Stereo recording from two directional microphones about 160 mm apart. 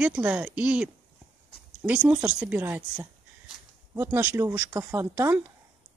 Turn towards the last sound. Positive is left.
turn(degrees=-15)  # may be behind; listen again after turning